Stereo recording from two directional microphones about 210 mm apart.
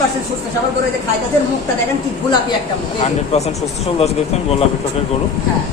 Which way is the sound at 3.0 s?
30° left (ahead or behind).